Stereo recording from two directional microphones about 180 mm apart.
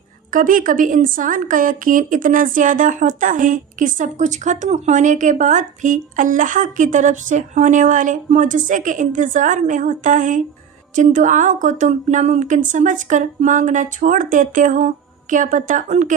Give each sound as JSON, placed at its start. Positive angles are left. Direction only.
{"t": 0.3, "sound": "speech", "side_deg": -50}